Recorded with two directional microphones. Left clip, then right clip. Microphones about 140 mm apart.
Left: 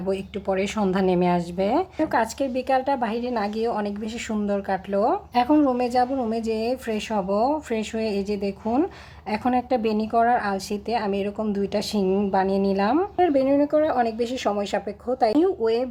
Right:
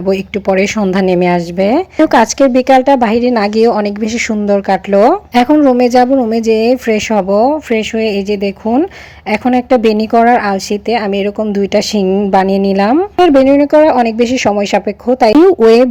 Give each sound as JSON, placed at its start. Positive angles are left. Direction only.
{"t": 0.1, "sound": "speech", "side_deg": -40}
{"t": 12.0, "sound": "speech", "side_deg": -25}
{"t": 12.3, "sound": "speech", "side_deg": -40}